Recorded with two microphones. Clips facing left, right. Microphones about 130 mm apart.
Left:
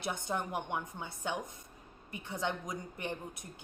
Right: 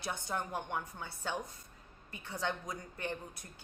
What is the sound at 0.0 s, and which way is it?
A woman's voice, 20° left (ahead or behind).